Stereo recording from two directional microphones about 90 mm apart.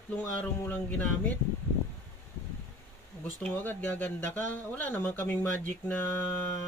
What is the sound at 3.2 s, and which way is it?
Speech, 15° left (ahead or behind).